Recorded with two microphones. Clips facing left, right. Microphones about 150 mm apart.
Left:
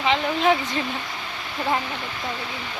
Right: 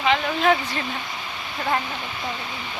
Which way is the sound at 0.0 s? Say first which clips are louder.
Even; 20° left (ahead or behind).